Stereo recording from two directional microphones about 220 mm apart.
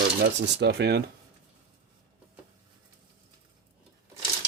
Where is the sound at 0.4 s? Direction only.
50° right (ahead or behind).